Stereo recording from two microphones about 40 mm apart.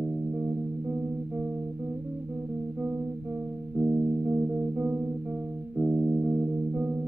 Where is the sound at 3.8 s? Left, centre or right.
Right.